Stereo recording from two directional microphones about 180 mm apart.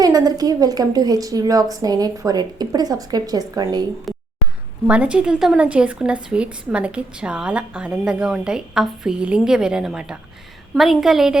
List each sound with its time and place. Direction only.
0.0 s a woman's voice: 20° right (ahead or behind)
4.1 s a sound: centre (ahead or behind)
4.9 s speech: 5° right (ahead or behind)